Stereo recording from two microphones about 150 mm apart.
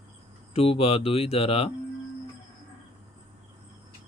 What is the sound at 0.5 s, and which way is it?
Speech, 40° left (ahead or behind).